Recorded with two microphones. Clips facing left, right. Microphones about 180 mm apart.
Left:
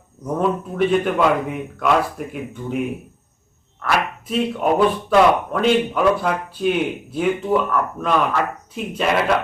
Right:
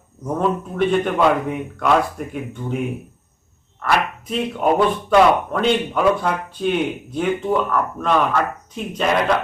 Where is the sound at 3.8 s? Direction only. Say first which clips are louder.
Right 1 dB; centre (ahead or behind).